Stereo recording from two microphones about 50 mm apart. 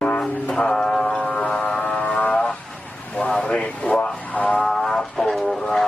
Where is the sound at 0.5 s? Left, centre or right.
Centre.